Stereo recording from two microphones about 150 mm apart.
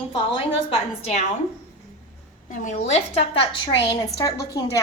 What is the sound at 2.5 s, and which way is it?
A woman's voice, 55° left (ahead or behind).